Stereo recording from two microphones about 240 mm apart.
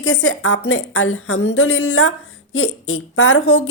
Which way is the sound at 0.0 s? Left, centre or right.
Left.